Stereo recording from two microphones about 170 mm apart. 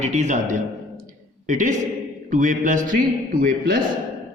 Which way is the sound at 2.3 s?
50° right (ahead or behind).